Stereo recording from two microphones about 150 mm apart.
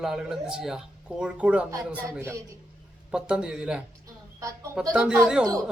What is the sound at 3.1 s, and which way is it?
Speech, 5° right (ahead or behind).